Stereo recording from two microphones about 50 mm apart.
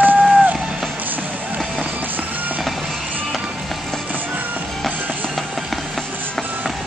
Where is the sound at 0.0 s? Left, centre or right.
Right.